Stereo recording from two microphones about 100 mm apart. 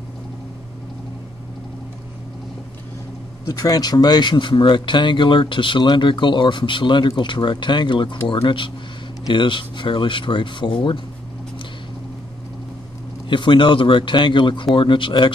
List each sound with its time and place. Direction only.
3.4 s speech: 35° left (ahead or behind); by 11.0 s 50° left (ahead or behind)
13.3 s speech: 55° left (ahead or behind)